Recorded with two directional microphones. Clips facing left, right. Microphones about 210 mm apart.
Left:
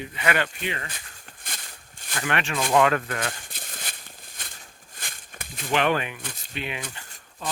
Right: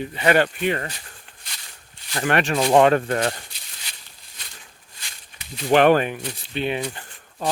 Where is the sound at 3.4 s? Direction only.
50° left (ahead or behind).